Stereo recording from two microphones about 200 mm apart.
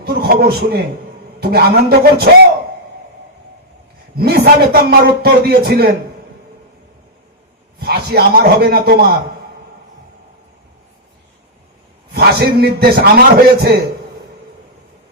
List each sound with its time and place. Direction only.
0.0 s a man's voice: 50° right (ahead or behind)
4.1 s a man's voice: 50° right (ahead or behind)
7.8 s a man's voice: 50° right (ahead or behind)
12.1 s a man's voice: 55° right (ahead or behind)